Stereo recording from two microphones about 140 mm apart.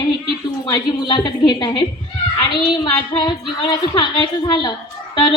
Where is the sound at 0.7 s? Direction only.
30° left (ahead or behind).